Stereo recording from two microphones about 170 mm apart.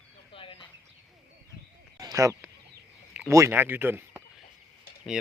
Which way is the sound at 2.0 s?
20° right (ahead or behind).